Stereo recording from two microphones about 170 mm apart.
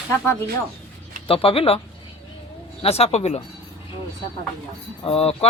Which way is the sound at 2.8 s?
35° left (ahead or behind).